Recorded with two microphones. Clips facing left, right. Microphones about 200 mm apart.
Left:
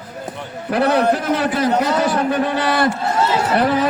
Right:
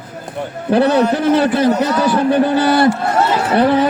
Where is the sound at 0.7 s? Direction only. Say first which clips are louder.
Right 3 dB; 30° right (ahead or behind).